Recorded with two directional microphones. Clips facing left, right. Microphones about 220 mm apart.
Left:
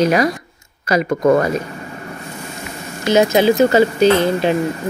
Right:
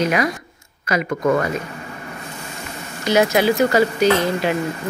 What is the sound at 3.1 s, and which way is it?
Speech, 25° left (ahead or behind).